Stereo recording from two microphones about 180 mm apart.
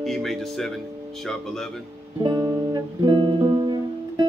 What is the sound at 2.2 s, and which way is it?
Music, 20° right (ahead or behind).